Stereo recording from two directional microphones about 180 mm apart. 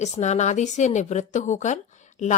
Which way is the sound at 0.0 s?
40° left (ahead or behind).